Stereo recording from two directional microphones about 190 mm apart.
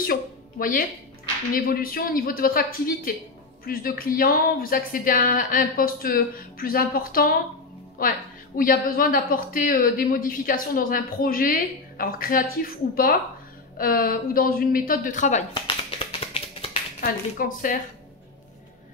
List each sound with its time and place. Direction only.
0.0 s music: 50° left (ahead or behind)
1.5 s a woman's voice: 50° left (ahead or behind)
16.2 s finger snapping: 30° left (ahead or behind)
17.0 s a woman's voice: 45° left (ahead or behind)